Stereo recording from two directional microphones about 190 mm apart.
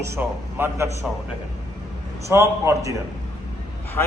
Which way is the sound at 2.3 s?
15° right (ahead or behind).